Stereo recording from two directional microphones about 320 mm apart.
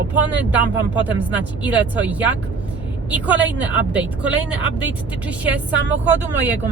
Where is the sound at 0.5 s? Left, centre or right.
Centre.